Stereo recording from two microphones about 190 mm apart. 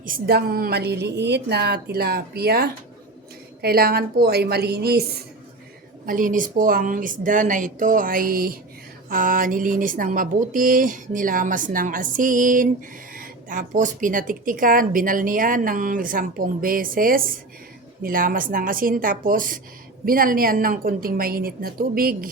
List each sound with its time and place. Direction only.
0.0 s a woman's voice: 50° right (ahead or behind)
6.1 s speech: 45° right (ahead or behind)